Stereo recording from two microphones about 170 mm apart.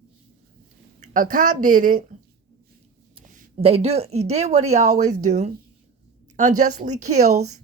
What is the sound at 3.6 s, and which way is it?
A woman's voice, 35° right (ahead or behind).